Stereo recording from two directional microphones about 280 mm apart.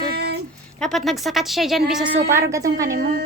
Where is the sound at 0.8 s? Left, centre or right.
Centre.